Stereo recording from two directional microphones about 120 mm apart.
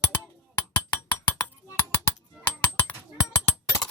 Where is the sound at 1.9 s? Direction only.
20° left (ahead or behind).